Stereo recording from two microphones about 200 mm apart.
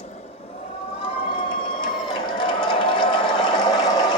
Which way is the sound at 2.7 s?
25° left (ahead or behind).